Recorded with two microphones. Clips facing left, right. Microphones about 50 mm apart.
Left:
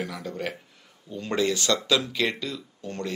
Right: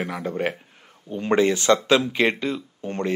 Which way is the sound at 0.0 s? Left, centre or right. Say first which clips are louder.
Right 6 dB; right.